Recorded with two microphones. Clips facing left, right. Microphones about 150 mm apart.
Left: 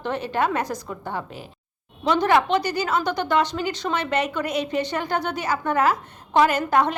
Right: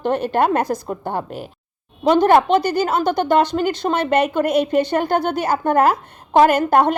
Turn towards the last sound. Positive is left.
turn(degrees=-55)  # may be behind; listen again after turning